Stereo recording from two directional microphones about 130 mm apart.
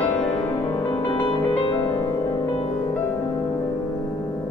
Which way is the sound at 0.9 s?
35° left (ahead or behind).